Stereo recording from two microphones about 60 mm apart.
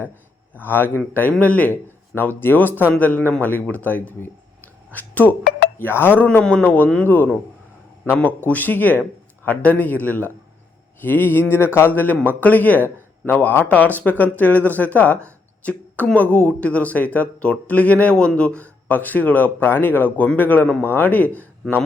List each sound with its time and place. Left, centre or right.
0.5 s speech: left
6.4 s speech: centre